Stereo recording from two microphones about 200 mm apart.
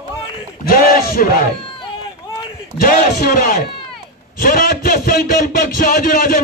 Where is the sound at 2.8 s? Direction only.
45° left (ahead or behind).